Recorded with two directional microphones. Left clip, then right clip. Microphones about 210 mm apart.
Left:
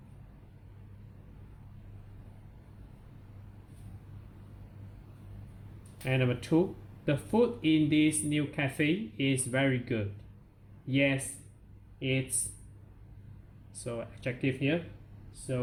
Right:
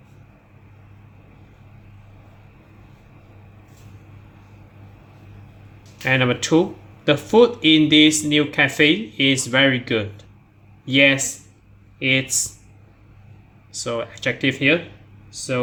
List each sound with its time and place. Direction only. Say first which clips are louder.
6.1 s speech: right 13 dB; 30° right (ahead or behind)
13.8 s speech: right 13 dB; 25° right (ahead or behind)